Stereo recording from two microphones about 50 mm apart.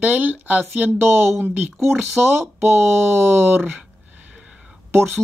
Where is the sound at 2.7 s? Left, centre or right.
Right.